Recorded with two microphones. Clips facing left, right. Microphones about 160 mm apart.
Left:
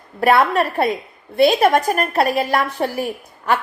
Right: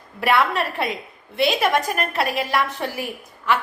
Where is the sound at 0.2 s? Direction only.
45° left (ahead or behind).